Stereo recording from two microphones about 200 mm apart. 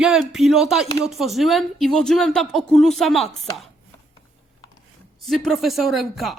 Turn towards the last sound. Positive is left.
turn(degrees=0)  # may be behind; listen again after turning